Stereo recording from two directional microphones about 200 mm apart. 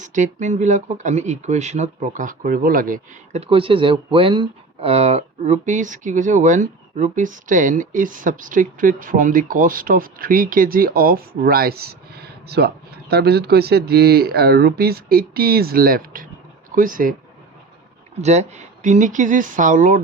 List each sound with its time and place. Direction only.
0.0 s speech: 40° right (ahead or behind)
3.4 s speech: 25° right (ahead or behind); by 17.2 s 45° right (ahead or behind)
18.2 s speech: 35° right (ahead or behind)